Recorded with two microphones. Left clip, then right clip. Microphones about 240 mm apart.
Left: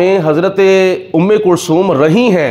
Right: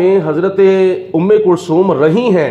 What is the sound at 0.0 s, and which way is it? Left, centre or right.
A man's voice, left.